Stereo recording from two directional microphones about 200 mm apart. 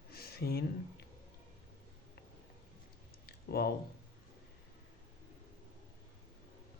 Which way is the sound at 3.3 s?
50° left (ahead or behind).